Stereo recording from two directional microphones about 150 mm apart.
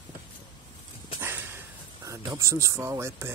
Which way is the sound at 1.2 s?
15° right (ahead or behind).